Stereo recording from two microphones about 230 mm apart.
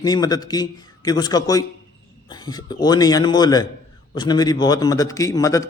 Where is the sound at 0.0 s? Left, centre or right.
Centre.